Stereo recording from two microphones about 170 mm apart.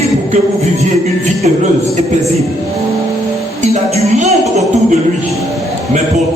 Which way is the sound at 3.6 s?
40° right (ahead or behind).